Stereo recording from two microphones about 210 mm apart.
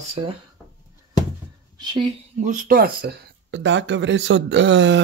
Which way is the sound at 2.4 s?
40° right (ahead or behind).